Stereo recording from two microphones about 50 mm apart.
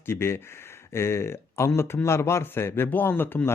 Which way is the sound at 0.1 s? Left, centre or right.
Left.